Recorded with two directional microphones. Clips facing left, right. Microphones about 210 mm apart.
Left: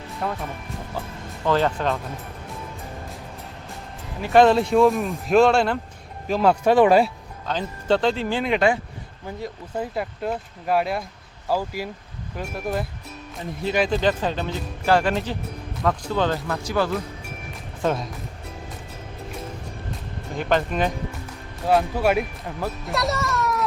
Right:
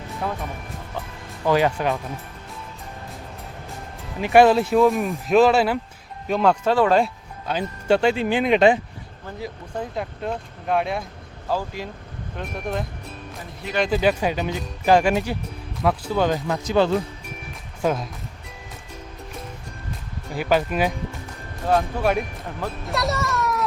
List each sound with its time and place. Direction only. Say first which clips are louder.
1.5 s speech: right 1 dB; 10° right (ahead or behind)
4.2 s speech: right 1 dB; 15° right (ahead or behind)
4.4 s speech: even; centre (ahead or behind); by 7.0 s 15° left (ahead or behind)
7.4 s speech: right 2 dB; 10° right (ahead or behind)
9.4 s speech: left 1 dB; 5° left (ahead or behind)
13.9 s speech: right 2 dB; 10° right (ahead or behind)
17.8 s speech: right 1 dB; centre (ahead or behind)
20.3 s speech: right 1 dB; 5° right (ahead or behind)
21.7 s speech: left 1 dB; 5° left (ahead or behind)